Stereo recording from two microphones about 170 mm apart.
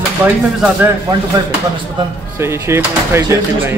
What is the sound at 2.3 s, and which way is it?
Speech, 15° right (ahead or behind).